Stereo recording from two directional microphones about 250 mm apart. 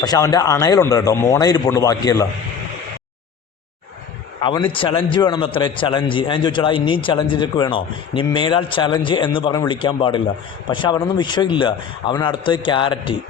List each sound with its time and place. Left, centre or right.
0.0 s a man's voice: centre
4.4 s a man's voice: centre